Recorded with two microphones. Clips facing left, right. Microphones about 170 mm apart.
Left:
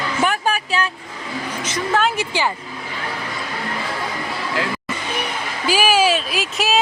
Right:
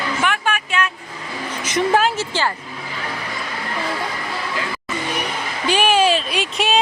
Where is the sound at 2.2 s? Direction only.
15° left (ahead or behind).